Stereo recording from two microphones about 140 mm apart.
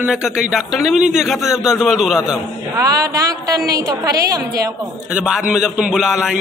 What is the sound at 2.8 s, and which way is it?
Speech, 25° right (ahead or behind).